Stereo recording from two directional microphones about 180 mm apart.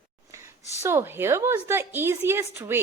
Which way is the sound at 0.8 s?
15° right (ahead or behind).